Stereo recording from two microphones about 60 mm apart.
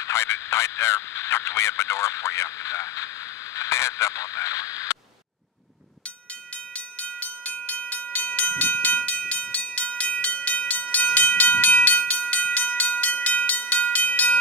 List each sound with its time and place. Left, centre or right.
0.0 s speech: left
3.5 s radio: left
6.7 s train: left